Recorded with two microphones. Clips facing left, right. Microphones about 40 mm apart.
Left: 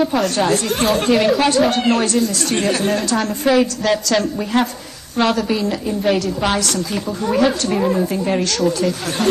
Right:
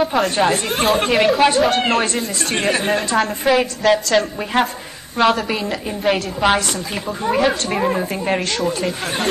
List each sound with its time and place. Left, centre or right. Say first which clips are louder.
0.0 s a woman's voice: even; centre
2.1 s a woman's voice: left 3 dB; right
3.2 s a woman's voice: left 1 dB; centre
4.5 s a woman's voice: even; right
5.2 s a woman's voice: right 2 dB; centre
5.7 s a woman's voice: left 1 dB; centre